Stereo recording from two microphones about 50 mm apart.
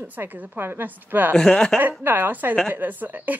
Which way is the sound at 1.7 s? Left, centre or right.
Right.